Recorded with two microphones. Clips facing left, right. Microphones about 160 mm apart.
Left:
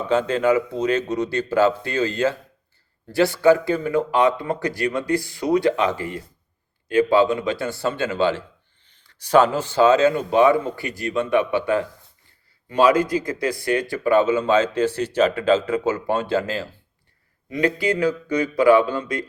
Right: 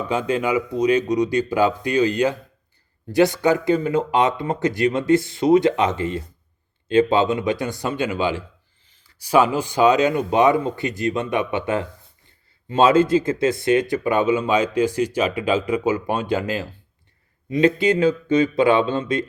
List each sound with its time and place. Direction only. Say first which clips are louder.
0.1 s speech: left 3 dB; 10° right (ahead or behind)